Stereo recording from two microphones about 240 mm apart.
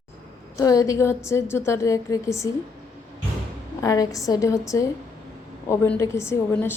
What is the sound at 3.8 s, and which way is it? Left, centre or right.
A woman's voice, centre.